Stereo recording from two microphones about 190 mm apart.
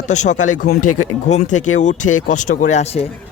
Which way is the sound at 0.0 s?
40° left (ahead or behind).